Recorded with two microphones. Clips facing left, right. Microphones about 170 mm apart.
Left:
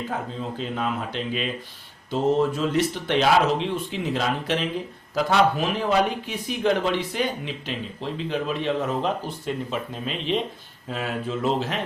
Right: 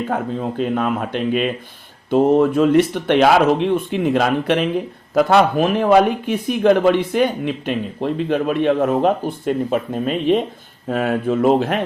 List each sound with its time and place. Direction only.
0.1 s speech: 60° right (ahead or behind)